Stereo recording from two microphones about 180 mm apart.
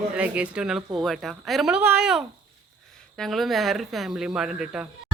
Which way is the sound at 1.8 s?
10° right (ahead or behind).